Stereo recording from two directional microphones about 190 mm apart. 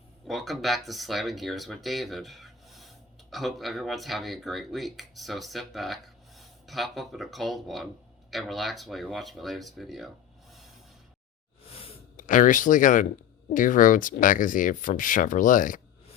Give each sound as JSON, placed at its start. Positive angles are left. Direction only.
{"t": 0.3, "sound": "speech", "side_deg": 0}
{"t": 11.7, "sound": "sneeze", "side_deg": 30}
{"t": 12.1, "sound": "speech", "side_deg": 45}